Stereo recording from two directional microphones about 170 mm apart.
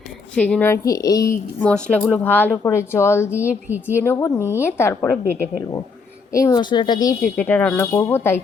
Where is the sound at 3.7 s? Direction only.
10° right (ahead or behind).